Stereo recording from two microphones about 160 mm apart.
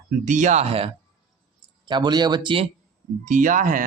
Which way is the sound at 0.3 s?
50° right (ahead or behind).